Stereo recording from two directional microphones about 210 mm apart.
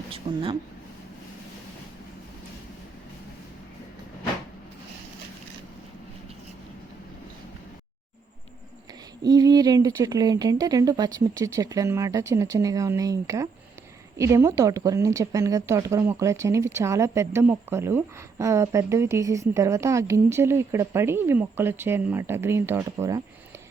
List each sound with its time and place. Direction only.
0.3 s speech: 20° right (ahead or behind)
9.2 s speech: 20° right (ahead or behind)